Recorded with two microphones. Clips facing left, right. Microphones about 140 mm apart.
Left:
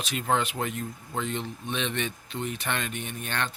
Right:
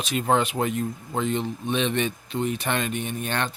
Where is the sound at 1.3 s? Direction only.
20° right (ahead or behind).